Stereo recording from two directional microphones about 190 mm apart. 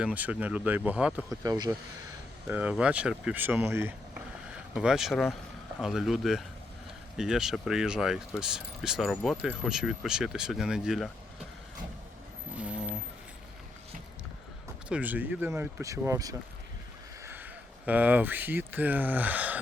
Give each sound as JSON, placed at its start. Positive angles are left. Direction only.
{"t": 0.0, "sound": "speech", "side_deg": -5}
{"t": 1.3, "sound": "speech", "side_deg": -20}
{"t": 2.5, "sound": "speech", "side_deg": -10}
{"t": 12.5, "sound": "a sound", "side_deg": -5}
{"t": 14.8, "sound": "speech", "side_deg": -5}